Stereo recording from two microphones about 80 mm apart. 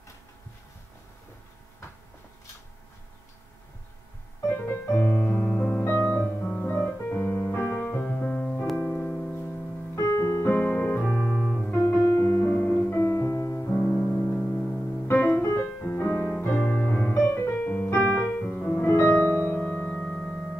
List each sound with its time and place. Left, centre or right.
4.5 s music: left
7.1 s piano: left
8.7 s music: left
9.9 s piano: left; by 11.5 s centre
11.8 s music: left
13.7 s music: centre
16.3 s piano: left
18.9 s music: left
19.9 s music: centre